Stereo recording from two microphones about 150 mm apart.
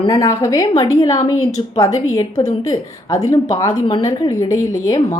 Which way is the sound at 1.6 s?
35° left (ahead or behind).